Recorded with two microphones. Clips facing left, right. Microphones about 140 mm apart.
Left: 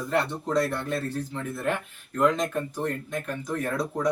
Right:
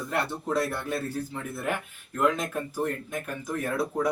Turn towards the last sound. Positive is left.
turn(degrees=-5)  # may be behind; listen again after turning